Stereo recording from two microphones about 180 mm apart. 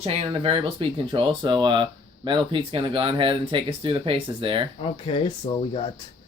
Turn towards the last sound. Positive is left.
turn(degrees=25)  # may be behind; listen again after turning